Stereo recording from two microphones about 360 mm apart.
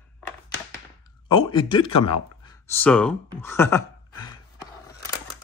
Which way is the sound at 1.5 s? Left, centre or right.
Centre.